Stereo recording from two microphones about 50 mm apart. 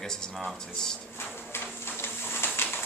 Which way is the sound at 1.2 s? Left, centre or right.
Left.